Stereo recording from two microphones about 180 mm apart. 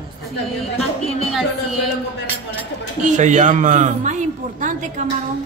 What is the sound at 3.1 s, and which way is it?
A man's voice, 40° right (ahead or behind).